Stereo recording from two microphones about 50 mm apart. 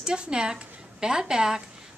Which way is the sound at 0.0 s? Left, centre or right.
Centre.